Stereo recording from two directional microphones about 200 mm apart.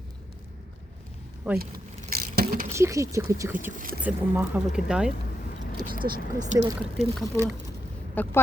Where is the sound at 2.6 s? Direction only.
15° right (ahead or behind).